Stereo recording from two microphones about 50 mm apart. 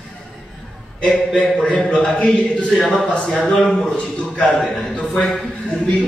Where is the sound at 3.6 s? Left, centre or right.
Centre.